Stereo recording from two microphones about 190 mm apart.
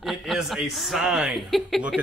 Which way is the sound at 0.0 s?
Centre (ahead or behind).